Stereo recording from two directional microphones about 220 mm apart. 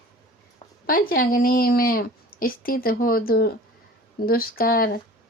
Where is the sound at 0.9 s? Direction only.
40° left (ahead or behind).